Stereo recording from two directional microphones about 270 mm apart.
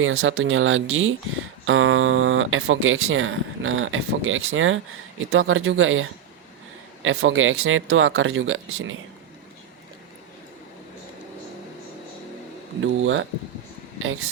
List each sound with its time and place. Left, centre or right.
0.0 s speech: right
12.8 s speech: right